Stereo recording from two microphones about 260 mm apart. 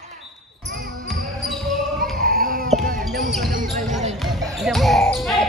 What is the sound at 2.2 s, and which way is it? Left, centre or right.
Baby cry, right.